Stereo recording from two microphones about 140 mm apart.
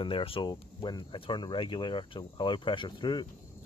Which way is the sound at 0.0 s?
40° left (ahead or behind).